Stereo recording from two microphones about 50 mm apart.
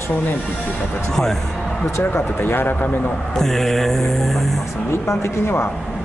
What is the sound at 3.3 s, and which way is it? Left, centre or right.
Mantra, centre.